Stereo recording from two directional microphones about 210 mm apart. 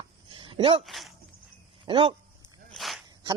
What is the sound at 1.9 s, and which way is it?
Speech, 25° right (ahead or behind).